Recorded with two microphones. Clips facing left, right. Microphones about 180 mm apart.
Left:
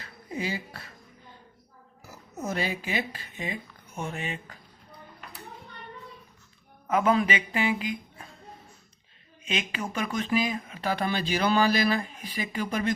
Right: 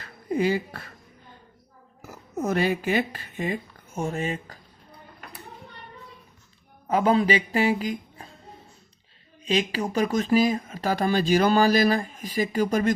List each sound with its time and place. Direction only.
0.3 s speech: 55° right (ahead or behind)
2.0 s speech: 55° right (ahead or behind); by 4.5 s 40° right (ahead or behind)
6.8 s speech: 30° right (ahead or behind)
9.4 s speech: 35° right (ahead or behind)